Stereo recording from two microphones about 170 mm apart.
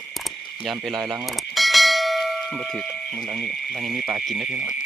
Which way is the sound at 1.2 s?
Centre (ahead or behind).